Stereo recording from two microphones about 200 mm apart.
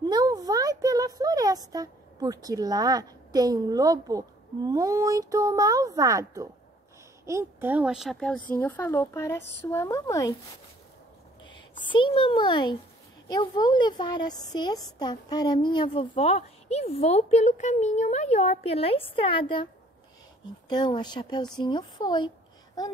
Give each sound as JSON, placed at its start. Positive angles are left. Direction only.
{"t": 0.1, "sound": "a sound", "side_deg": -20}
{"t": 4.6, "sound": "a child's voice", "side_deg": -15}
{"t": 11.9, "sound": "a woman's voice", "side_deg": 25}